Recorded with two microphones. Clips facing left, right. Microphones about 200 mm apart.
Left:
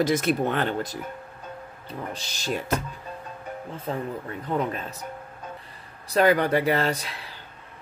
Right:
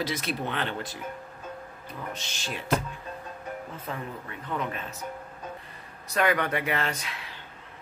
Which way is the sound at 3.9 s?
35° left (ahead or behind).